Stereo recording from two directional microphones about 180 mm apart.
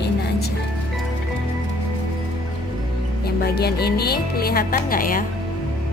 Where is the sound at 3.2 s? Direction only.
60° left (ahead or behind).